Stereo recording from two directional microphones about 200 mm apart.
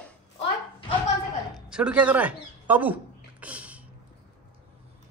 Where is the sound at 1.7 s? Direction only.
5° right (ahead or behind).